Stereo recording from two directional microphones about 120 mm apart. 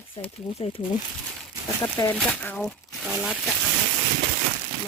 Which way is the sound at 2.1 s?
10° left (ahead or behind).